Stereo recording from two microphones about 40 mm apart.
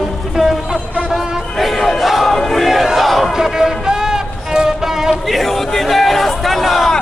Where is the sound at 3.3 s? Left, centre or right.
Centre.